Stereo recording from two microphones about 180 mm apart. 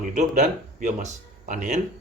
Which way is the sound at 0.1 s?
40° right (ahead or behind).